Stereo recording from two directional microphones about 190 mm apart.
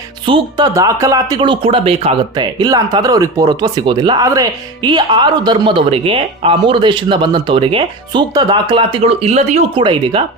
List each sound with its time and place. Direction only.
0.3 s speech: 25° right (ahead or behind)
2.3 s speech: 20° right (ahead or behind)